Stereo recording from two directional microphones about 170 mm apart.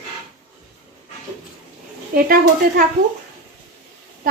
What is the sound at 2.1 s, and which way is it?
Speech, 60° right (ahead or behind).